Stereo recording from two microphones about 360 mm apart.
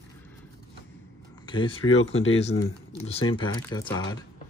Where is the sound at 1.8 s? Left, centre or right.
Left.